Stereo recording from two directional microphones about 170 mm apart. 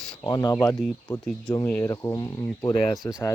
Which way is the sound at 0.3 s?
25° left (ahead or behind).